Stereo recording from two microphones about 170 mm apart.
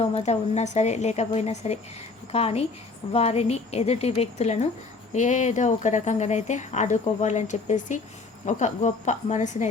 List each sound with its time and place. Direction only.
0.0 s a woman's voice: 40° left (ahead or behind)